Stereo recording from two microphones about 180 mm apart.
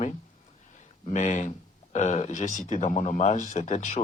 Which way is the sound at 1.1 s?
40° left (ahead or behind).